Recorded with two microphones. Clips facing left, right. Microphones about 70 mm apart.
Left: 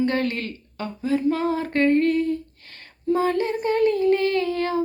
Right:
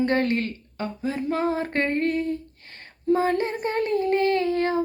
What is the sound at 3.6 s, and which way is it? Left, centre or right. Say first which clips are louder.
Child singing: left 8 dB; right.